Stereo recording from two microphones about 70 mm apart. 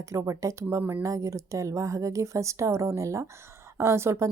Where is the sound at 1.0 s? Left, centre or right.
Right.